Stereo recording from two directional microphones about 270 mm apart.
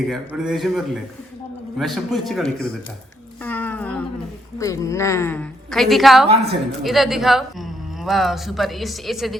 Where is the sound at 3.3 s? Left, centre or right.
Centre.